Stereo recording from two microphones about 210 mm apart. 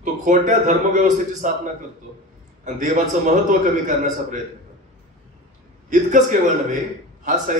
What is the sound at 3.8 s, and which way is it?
Speech, 35° right (ahead or behind).